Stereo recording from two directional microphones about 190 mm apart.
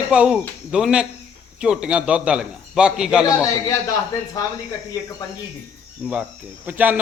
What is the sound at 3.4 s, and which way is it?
Speech, 15° left (ahead or behind).